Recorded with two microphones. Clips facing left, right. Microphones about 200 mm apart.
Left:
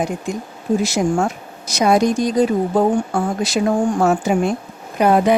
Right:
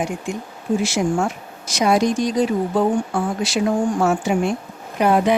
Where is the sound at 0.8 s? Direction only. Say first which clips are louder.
Left 2 dB; 40° left (ahead or behind).